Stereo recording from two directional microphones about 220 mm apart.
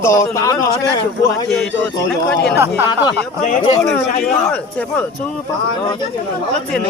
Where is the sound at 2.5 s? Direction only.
10° right (ahead or behind).